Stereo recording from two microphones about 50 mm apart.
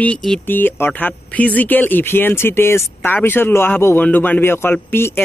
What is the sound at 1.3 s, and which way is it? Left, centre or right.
Speech, left.